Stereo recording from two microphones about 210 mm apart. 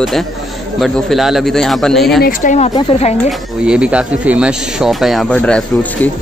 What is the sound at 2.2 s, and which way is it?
Speech, 35° left (ahead or behind).